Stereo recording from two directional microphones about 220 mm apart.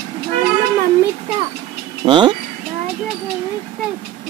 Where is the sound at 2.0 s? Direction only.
20° right (ahead or behind).